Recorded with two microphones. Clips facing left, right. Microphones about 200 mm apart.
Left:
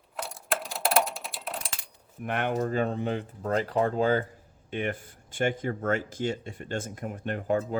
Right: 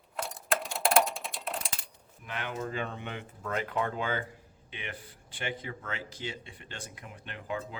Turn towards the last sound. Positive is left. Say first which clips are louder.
# left 10 dB
turn(degrees=45)  # may be behind; listen again after turning